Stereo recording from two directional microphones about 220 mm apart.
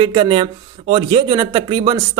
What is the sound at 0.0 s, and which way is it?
A man's voice, 20° right (ahead or behind).